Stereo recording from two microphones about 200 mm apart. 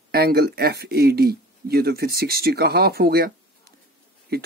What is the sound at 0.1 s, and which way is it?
Speech, 50° right (ahead or behind).